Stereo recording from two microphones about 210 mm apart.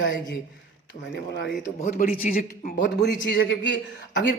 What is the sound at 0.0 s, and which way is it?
Speech, 60° left (ahead or behind).